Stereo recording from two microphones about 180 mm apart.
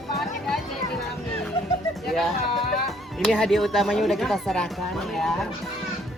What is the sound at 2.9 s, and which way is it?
Speech, centre (ahead or behind).